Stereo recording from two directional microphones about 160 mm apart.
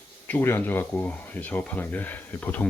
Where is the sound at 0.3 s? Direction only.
10° left (ahead or behind).